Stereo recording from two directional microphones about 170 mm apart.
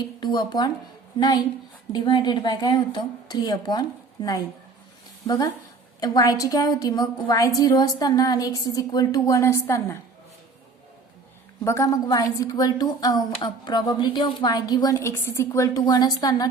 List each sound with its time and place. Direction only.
0.2 s speech: 25° left (ahead or behind)
1.9 s a woman's voice: 25° left (ahead or behind)
11.6 s a woman's voice: 20° left (ahead or behind)